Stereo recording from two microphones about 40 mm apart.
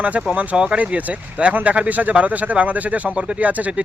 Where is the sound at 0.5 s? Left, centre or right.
Right.